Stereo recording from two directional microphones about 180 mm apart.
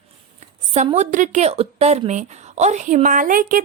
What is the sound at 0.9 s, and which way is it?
A woman's voice, 40° right (ahead or behind).